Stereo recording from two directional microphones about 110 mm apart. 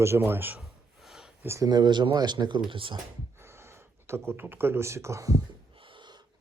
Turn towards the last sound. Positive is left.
turn(degrees=-45)  # may be behind; listen again after turning